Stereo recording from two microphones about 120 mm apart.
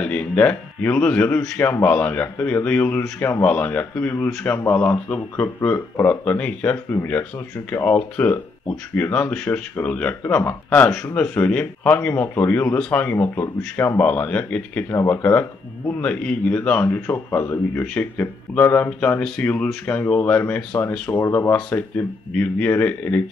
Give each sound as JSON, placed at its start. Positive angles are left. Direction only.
{"t": 0.0, "sound": "a man's voice", "side_deg": 10}